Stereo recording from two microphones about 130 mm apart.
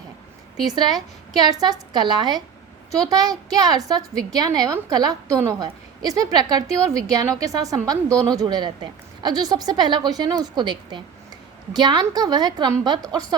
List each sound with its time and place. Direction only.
0.6 s a woman's voice: 30° right (ahead or behind)